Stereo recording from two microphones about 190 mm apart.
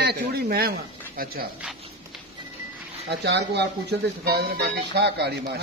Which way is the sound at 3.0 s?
65° right (ahead or behind).